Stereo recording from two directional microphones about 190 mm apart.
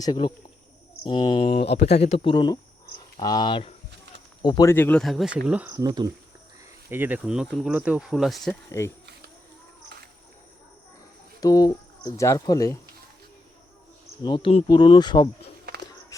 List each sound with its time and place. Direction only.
0.0 s speech: 20° left (ahead or behind); by 5.8 s 10° right (ahead or behind)
5.8 s speech: 20° right (ahead or behind)
6.9 s speech: 10° right (ahead or behind)
8.7 s speech: 15° left (ahead or behind)
11.3 s speech: 20° left (ahead or behind)
14.3 s speech: 25° left (ahead or behind)